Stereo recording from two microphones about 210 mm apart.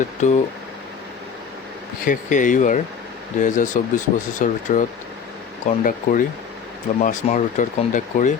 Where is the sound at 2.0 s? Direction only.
40° left (ahead or behind).